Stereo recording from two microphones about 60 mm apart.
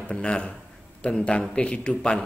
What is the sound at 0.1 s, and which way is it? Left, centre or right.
A man's voice, centre.